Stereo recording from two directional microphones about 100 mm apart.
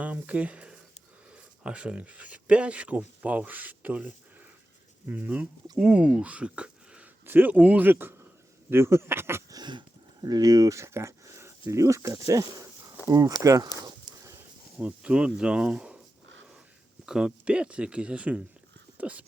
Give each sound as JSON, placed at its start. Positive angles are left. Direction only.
{"t": 0.0, "sound": "speech", "side_deg": -15}
{"t": 9.5, "sound": "speech", "side_deg": -45}
{"t": 13.8, "sound": "a sound", "side_deg": -45}
{"t": 14.8, "sound": "speech", "side_deg": -10}
{"t": 17.1, "sound": "speech", "side_deg": -10}